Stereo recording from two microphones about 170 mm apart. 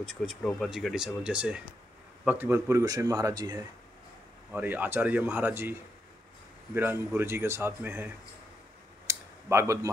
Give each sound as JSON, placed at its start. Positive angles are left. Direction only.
{"t": 0.0, "sound": "speech", "side_deg": 0}
{"t": 4.5, "sound": "speech", "side_deg": -10}
{"t": 9.0, "sound": "a sound", "side_deg": -15}